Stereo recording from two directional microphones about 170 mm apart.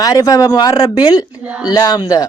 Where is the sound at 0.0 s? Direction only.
20° left (ahead or behind).